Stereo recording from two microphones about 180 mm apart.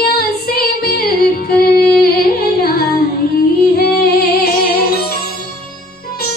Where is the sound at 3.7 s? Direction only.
60° left (ahead or behind).